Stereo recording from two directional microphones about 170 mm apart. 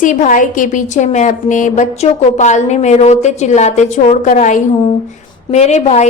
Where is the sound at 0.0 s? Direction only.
50° left (ahead or behind).